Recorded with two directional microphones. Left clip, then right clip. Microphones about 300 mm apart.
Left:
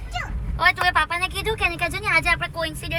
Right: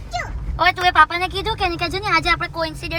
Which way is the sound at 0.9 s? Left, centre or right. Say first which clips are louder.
Right 6 dB; right.